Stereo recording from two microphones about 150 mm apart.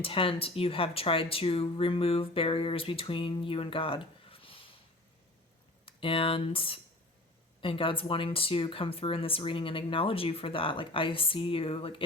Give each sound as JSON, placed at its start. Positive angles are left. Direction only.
{"t": 0.0, "sound": "speech", "side_deg": 35}
{"t": 5.8, "sound": "speech", "side_deg": 35}